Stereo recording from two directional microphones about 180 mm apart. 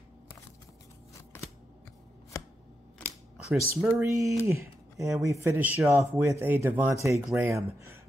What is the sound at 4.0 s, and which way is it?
Speech, 15° right (ahead or behind).